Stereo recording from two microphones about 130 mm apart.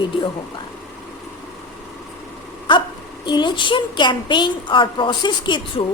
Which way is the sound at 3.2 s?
35° left (ahead or behind).